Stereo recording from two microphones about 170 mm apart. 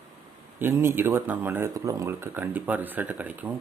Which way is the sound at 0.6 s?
15° right (ahead or behind).